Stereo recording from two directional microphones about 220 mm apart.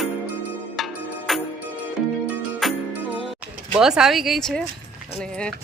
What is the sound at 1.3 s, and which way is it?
Music, centre (ahead or behind).